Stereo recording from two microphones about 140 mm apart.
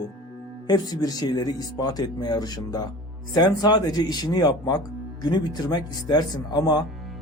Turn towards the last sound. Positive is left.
turn(degrees=30)  # may be behind; listen again after turning